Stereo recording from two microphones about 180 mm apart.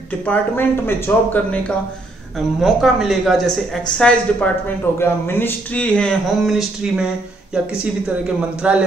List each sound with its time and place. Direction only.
0.2 s speech: 10° left (ahead or behind)
2.3 s speech: centre (ahead or behind)
8.4 s a man's voice: 5° right (ahead or behind)